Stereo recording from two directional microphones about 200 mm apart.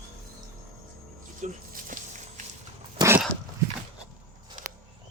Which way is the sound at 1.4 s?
40° right (ahead or behind).